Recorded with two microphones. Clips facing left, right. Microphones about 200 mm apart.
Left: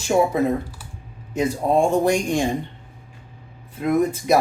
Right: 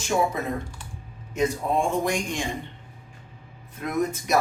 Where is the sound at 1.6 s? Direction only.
45° left (ahead or behind).